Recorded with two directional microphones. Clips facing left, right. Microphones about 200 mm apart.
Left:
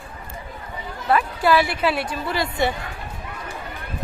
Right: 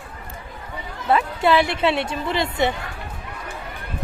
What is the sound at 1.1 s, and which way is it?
A woman's voice, 25° right (ahead or behind).